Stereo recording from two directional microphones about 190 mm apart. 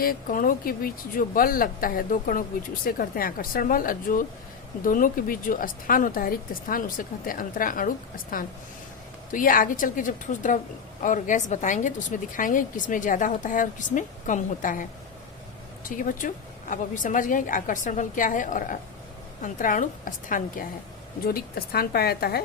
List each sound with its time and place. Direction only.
0.0 s a woman's voice: 50° left (ahead or behind)